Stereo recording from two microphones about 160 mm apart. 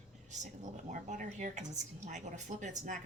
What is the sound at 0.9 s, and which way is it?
Speech, 50° right (ahead or behind).